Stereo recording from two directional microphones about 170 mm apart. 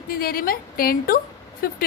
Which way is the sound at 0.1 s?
60° left (ahead or behind).